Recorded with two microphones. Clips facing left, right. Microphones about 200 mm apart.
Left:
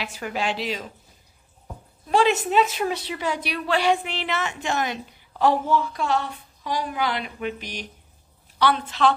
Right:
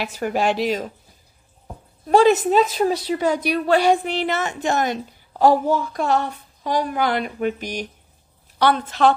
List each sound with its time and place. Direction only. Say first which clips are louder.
0.0 s a woman's voice: right 6 dB; 45° right (ahead or behind)
2.0 s a woman's voice: right 6 dB; 45° right (ahead or behind)